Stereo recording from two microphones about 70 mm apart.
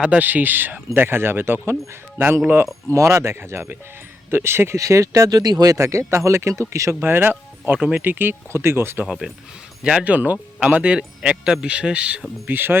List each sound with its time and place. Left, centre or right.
0.0 s speech: right
2.9 s speech: right
5.4 s speech: right
5.7 s speech: right
7.0 s speech: right
9.8 s speech: centre
12.5 s speech: right